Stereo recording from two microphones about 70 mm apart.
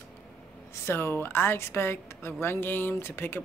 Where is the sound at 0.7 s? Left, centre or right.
Left.